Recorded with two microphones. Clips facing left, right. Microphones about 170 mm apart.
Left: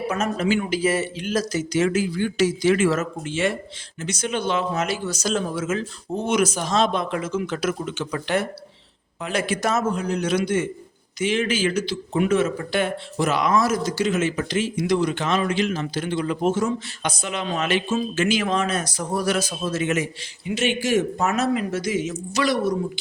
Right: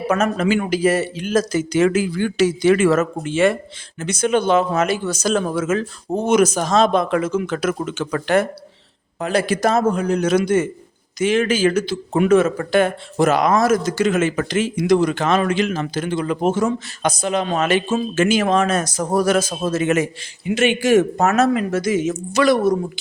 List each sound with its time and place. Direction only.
0.2 s a man's voice: 50° right (ahead or behind)
6.2 s a man's voice: 45° right (ahead or behind)
7.1 s a man's voice: 60° right (ahead or behind)
9.2 s speech: 35° right (ahead or behind)
9.9 s a man's voice: 50° right (ahead or behind)
16.0 s a man's voice: 45° right (ahead or behind)
16.2 s a man's voice: 60° right (ahead or behind)
21.3 s a man's voice: 50° right (ahead or behind)